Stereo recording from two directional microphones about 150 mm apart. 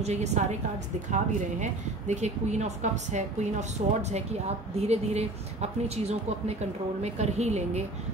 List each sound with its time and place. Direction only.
0.0 s speech: 50° right (ahead or behind)